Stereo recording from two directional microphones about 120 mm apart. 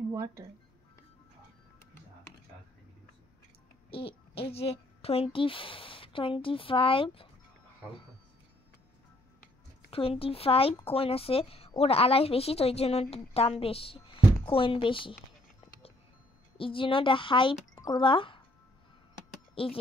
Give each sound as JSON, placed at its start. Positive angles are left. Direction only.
{"t": 0.1, "sound": "speech", "side_deg": -25}
{"t": 3.9, "sound": "a child's voice", "side_deg": 50}
{"t": 9.8, "sound": "a woman's voice", "side_deg": 50}
{"t": 16.5, "sound": "speech", "side_deg": 45}
{"t": 17.7, "sound": "speech", "side_deg": 35}
{"t": 19.5, "sound": "speech", "side_deg": 50}